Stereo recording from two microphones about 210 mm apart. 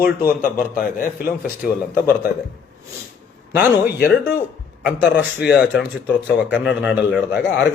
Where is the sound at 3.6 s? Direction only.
50° left (ahead or behind).